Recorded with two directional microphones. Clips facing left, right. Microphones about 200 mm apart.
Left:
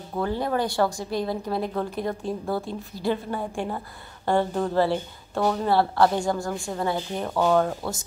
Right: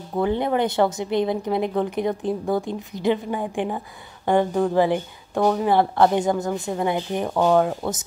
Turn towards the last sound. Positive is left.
turn(degrees=-15)  # may be behind; listen again after turning